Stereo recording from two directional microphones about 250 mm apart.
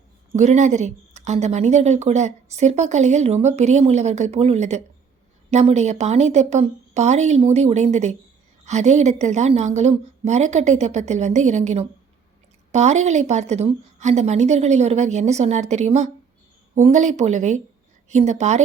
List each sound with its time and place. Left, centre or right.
0.3 s speech: right